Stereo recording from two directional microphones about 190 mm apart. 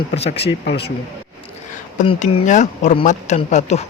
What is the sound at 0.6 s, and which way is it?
Speech, 60° left (ahead or behind).